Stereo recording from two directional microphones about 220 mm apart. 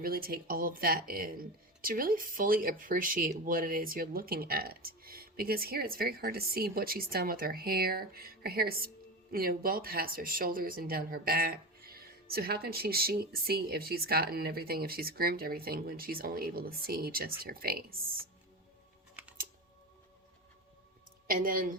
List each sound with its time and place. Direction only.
0.0 s speech: 40° right (ahead or behind)
21.2 s a woman's voice: 40° right (ahead or behind)